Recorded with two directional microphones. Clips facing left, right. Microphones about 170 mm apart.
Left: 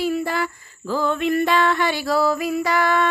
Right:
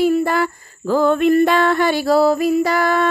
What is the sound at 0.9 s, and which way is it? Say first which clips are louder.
Music: right 7 dB; 50° right (ahead or behind).